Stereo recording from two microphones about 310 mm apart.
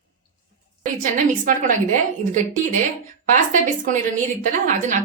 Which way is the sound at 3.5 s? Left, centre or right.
Right.